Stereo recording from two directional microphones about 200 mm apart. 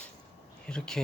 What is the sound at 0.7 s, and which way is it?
Speech, 5° left (ahead or behind).